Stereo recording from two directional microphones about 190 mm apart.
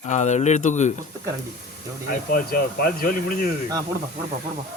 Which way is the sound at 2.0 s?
50° left (ahead or behind).